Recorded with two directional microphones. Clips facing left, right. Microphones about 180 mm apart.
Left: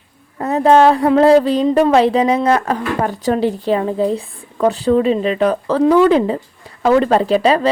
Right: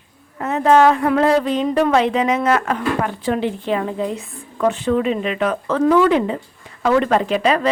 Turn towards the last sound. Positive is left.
turn(degrees=30)  # may be behind; listen again after turning